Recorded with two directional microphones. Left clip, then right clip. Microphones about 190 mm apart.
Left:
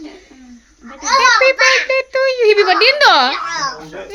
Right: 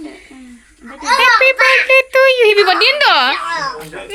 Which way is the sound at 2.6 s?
10° left (ahead or behind).